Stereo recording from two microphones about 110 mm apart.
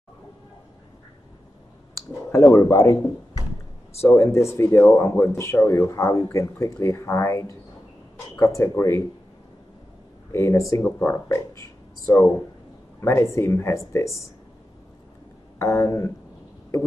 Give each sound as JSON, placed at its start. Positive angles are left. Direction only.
{"t": 2.0, "sound": "speech", "side_deg": 25}
{"t": 10.3, "sound": "speech", "side_deg": 25}
{"t": 15.6, "sound": "speech", "side_deg": 25}